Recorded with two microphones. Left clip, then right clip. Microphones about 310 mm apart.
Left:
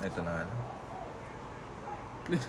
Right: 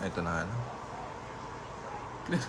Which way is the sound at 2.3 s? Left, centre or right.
Right.